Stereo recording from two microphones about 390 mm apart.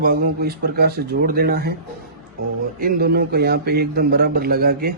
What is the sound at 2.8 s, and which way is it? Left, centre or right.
A man's voice, right.